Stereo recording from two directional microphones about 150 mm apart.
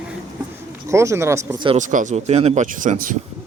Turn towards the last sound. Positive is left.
turn(degrees=-60)  # may be behind; listen again after turning